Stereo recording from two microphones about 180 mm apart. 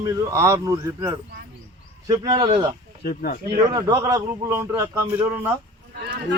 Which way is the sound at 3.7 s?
20° right (ahead or behind).